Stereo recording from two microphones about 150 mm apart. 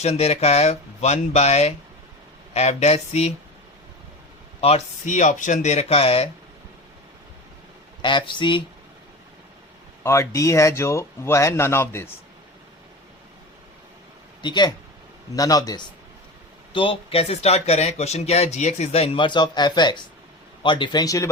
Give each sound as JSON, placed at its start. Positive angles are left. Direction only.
{"t": 0.0, "sound": "speech", "side_deg": 45}
{"t": 4.6, "sound": "speech", "side_deg": 50}
{"t": 8.0, "sound": "speech", "side_deg": 30}
{"t": 10.0, "sound": "speech", "side_deg": 20}
{"t": 14.4, "sound": "speech", "side_deg": 30}
{"t": 16.7, "sound": "speech", "side_deg": 35}